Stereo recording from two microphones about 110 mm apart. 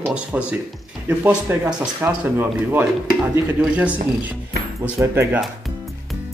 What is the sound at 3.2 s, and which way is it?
Speech, 10° right (ahead or behind).